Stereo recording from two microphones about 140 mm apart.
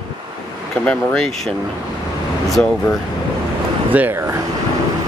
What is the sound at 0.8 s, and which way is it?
Speech, 5° left (ahead or behind).